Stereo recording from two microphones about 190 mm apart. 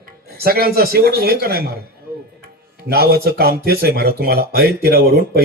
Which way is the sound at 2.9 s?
55° right (ahead or behind).